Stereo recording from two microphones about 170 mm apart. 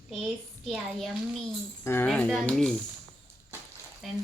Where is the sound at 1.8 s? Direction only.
15° left (ahead or behind).